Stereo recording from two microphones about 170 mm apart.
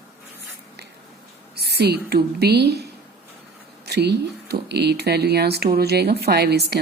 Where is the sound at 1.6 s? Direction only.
75° right (ahead or behind).